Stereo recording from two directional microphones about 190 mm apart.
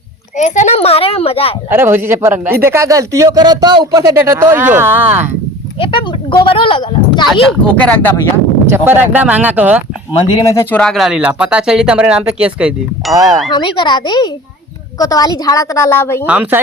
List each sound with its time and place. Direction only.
0.3 s a child's voice: 40° left (ahead or behind)
1.7 s speech: 10° right (ahead or behind)
5.8 s speech: 25° left (ahead or behind)
7.8 s a woman's voice: 10° left (ahead or behind)
8.7 s speech: 10° right (ahead or behind)
10.2 s speech: 20° left (ahead or behind); by 13.1 s 5° right (ahead or behind)
13.5 s a woman's voice: 25° left (ahead or behind)
16.2 s speech: 5° right (ahead or behind)